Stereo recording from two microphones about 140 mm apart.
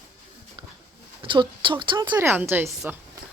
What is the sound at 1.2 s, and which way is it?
Speech, 35° right (ahead or behind).